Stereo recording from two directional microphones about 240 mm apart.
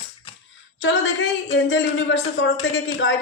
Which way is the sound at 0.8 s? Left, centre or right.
Left.